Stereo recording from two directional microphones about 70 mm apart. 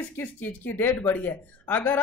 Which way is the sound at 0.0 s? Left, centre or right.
Left.